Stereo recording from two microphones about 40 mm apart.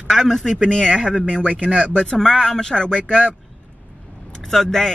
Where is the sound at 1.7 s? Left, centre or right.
Centre.